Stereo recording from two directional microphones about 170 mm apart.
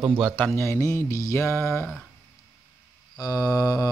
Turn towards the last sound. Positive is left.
turn(degrees=20)  # may be behind; listen again after turning